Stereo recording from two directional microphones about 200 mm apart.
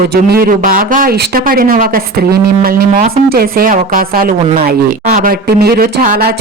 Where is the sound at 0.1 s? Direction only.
50° right (ahead or behind).